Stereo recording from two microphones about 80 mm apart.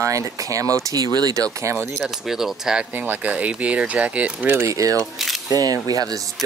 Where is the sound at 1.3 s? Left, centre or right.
Right.